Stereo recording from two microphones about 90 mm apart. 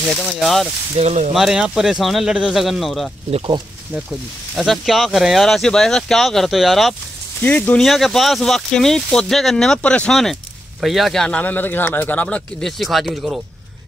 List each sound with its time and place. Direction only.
0.0 s speech: centre (ahead or behind)
1.0 s speech: 90° right
1.3 s speech: 5° right (ahead or behind)
4.6 s speech: centre (ahead or behind)
7.4 s speech: 20° left (ahead or behind)
7.8 s speech: centre (ahead or behind)